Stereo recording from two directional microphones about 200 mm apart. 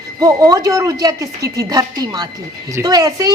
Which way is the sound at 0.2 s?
15° right (ahead or behind).